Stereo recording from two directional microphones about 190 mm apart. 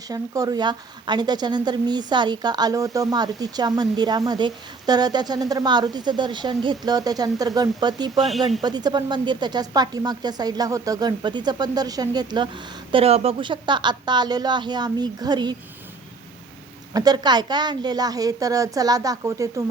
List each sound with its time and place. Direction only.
0.1 s a woman's voice: 20° right (ahead or behind)
16.9 s a woman's voice: 20° right (ahead or behind)